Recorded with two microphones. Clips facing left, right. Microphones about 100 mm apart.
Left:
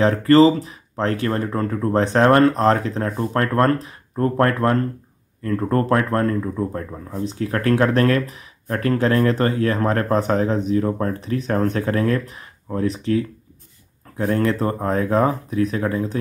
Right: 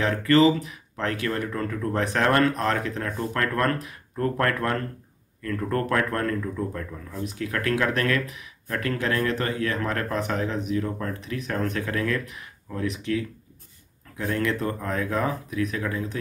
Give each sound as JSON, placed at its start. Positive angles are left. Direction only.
{"t": 0.0, "sound": "speech", "side_deg": 35}